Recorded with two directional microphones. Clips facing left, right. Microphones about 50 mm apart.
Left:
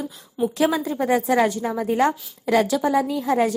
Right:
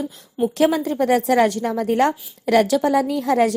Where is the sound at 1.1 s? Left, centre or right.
Right.